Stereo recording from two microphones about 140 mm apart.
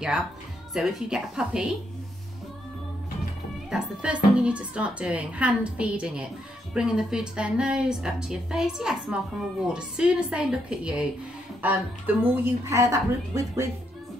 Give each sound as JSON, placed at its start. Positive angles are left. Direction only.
{"t": 0.7, "sound": "a woman's voice", "side_deg": -5}
{"t": 3.7, "sound": "a woman's voice", "side_deg": -5}